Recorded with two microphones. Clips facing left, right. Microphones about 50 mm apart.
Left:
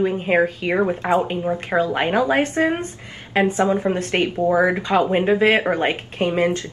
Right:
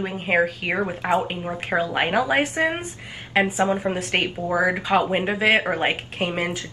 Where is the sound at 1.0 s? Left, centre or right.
Right.